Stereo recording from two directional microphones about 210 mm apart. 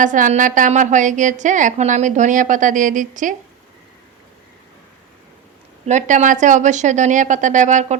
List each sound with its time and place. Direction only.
0.0 s a woman's voice: 40° right (ahead or behind)
5.8 s a woman's voice: 35° right (ahead or behind)